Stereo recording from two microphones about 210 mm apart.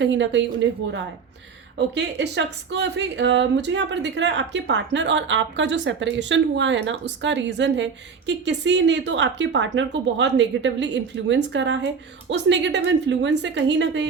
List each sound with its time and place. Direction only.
0.0 s speech: 60° right (ahead or behind)
2.0 s speech: 55° right (ahead or behind)